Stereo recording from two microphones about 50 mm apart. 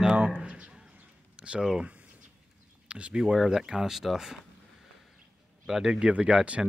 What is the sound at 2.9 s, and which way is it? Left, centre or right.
Speech, right.